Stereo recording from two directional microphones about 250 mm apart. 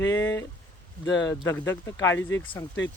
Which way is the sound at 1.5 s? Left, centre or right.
Centre.